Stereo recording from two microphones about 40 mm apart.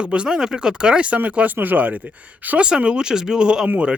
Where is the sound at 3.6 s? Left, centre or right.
Right.